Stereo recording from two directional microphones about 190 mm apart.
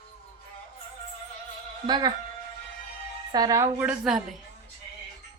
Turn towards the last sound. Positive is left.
turn(degrees=-5)  # may be behind; listen again after turning